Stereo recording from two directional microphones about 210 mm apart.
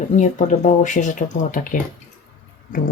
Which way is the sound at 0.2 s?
35° left (ahead or behind).